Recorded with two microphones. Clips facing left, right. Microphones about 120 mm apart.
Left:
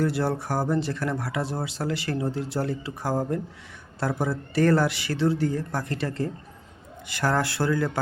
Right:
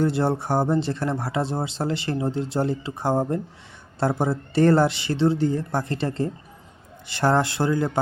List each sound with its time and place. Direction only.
0.0 s speech: 25° right (ahead or behind)